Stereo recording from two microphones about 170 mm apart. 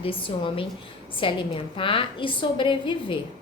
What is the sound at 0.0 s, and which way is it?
A woman's voice, 30° left (ahead or behind).